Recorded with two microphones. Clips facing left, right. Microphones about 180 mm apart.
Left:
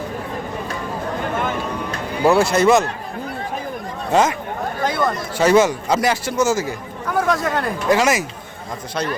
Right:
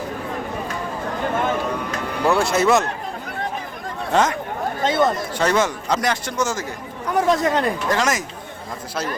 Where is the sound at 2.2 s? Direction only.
5° left (ahead or behind).